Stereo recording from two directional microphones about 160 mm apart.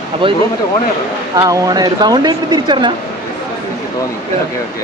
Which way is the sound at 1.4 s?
20° right (ahead or behind).